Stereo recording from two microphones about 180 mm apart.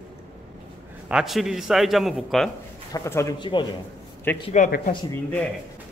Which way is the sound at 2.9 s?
15° left (ahead or behind).